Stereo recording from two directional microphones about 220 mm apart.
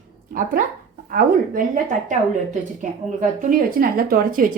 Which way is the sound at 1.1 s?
35° right (ahead or behind).